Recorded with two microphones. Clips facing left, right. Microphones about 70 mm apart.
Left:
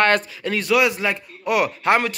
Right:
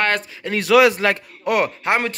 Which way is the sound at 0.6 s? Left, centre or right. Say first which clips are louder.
Right 6 dB; right.